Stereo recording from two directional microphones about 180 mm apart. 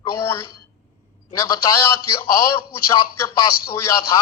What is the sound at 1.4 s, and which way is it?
A man's voice, 15° left (ahead or behind).